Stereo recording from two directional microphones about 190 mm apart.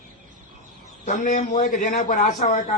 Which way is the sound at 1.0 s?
40° left (ahead or behind).